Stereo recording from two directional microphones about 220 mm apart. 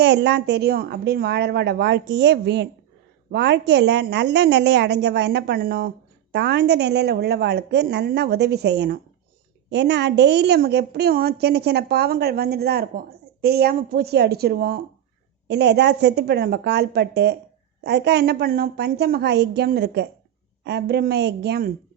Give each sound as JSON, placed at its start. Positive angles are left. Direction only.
{"t": 0.0, "sound": "a woman's voice", "side_deg": -50}